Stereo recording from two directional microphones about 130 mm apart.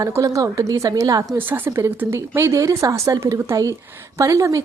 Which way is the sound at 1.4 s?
15° right (ahead or behind).